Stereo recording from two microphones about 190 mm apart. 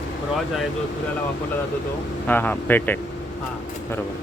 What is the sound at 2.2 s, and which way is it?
Speech, 10° left (ahead or behind).